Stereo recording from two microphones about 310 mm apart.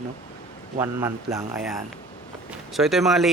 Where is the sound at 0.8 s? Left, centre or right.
Centre.